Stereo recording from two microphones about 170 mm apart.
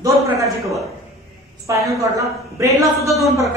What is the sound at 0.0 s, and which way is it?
Speech, 20° right (ahead or behind).